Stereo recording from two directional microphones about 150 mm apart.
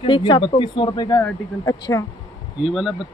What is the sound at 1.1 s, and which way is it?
Speech, 20° left (ahead or behind).